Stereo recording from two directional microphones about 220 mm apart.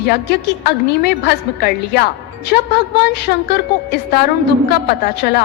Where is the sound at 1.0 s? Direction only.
45° left (ahead or behind).